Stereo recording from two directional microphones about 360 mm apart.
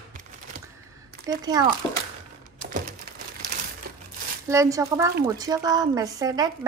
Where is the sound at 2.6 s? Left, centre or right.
Right.